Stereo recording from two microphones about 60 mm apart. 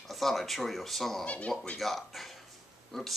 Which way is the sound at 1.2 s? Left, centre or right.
Centre.